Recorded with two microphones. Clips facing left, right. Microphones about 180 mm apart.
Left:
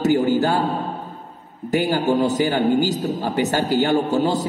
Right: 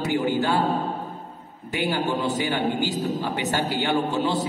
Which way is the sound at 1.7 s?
40° left (ahead or behind).